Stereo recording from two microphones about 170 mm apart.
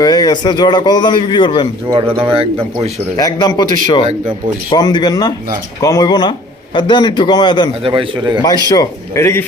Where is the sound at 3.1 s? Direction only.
25° left (ahead or behind).